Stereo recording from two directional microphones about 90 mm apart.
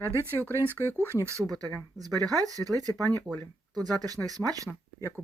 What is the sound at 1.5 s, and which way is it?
Speech, 45° right (ahead or behind).